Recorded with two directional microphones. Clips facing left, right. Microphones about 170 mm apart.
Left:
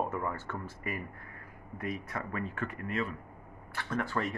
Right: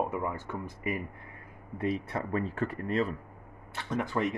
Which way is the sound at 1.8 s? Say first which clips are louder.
Right 6 dB; 30° right (ahead or behind).